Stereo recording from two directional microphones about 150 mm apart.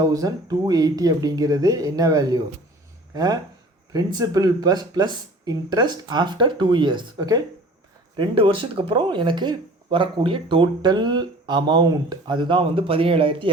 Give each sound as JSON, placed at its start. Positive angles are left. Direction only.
{"t": 0.0, "sound": "speech", "side_deg": -25}